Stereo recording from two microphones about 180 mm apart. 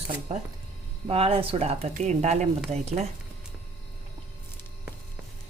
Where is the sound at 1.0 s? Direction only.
35° right (ahead or behind).